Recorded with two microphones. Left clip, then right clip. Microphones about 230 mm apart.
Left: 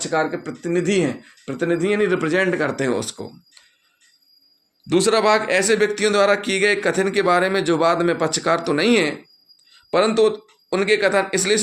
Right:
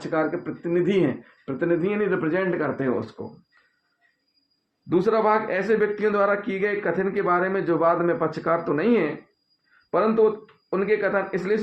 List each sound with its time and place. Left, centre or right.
0.0 s speech: left
4.9 s speech: left